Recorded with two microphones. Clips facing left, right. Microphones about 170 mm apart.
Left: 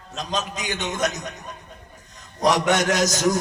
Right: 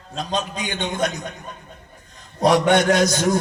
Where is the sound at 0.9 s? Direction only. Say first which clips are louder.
Right 2 dB; 45° left (ahead or behind).